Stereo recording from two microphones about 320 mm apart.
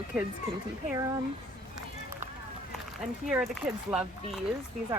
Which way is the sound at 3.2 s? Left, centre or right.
Centre.